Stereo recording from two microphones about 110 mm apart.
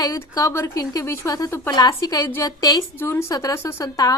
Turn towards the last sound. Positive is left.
turn(degrees=35)  # may be behind; listen again after turning